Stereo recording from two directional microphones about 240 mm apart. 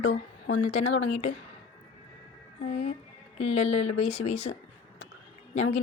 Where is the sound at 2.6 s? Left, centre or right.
Left.